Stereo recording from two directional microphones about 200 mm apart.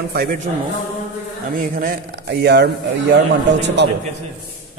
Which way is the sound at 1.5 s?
45° right (ahead or behind).